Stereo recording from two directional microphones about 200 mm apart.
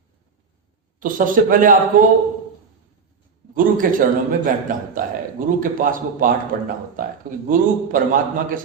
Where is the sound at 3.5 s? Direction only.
45° right (ahead or behind).